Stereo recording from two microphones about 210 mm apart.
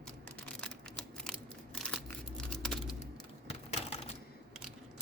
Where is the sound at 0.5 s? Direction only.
5° left (ahead or behind).